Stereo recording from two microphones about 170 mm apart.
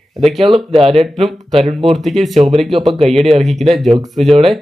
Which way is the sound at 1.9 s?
Centre (ahead or behind).